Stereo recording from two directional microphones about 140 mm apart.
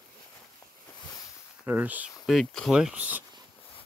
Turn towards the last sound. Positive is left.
turn(degrees=-10)  # may be behind; listen again after turning